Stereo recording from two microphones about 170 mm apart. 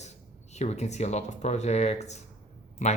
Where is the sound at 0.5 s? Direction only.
40° left (ahead or behind).